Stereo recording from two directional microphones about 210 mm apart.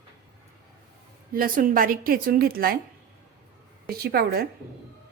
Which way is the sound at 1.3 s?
45° right (ahead or behind).